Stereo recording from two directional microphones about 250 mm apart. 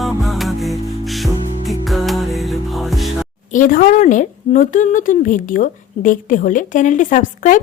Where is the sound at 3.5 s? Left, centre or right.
Left.